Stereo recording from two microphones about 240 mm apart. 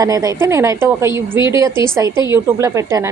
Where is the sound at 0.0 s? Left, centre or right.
Centre.